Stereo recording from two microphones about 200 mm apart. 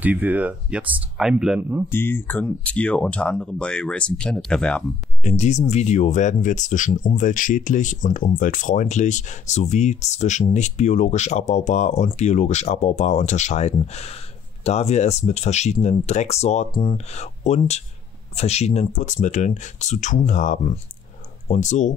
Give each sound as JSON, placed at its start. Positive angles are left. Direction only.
{"t": 0.0, "sound": "speech", "side_deg": -10}
{"t": 1.9, "sound": "speech", "side_deg": 10}
{"t": 5.2, "sound": "speech", "side_deg": 35}
{"t": 16.7, "sound": "speech", "side_deg": 20}
{"t": 17.1, "sound": "speech", "side_deg": 35}